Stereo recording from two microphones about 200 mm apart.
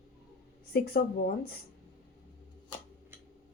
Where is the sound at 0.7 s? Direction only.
55° left (ahead or behind).